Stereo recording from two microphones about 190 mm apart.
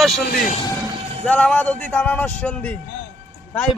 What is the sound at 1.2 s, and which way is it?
Speech, 5° left (ahead or behind).